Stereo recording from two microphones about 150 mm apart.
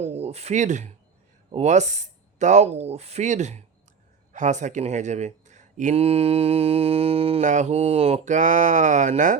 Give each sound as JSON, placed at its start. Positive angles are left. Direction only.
{"t": 0.0, "sound": "speech", "side_deg": -45}